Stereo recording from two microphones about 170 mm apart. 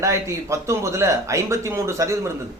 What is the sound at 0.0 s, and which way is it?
Speech, 15° right (ahead or behind).